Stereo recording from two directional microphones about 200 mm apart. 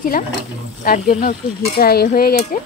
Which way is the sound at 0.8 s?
40° left (ahead or behind).